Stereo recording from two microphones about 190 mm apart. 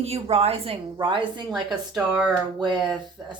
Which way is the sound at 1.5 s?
Centre (ahead or behind).